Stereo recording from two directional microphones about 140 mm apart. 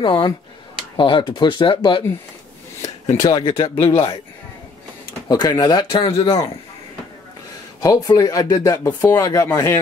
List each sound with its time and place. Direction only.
0.0 s speech: 35° left (ahead or behind)
3.2 s speech: 30° left (ahead or behind)
5.3 s speech: 30° left (ahead or behind)
7.8 s speech: 25° left (ahead or behind)